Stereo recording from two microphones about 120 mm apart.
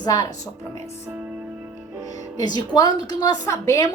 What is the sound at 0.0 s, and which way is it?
Speech, 30° left (ahead or behind).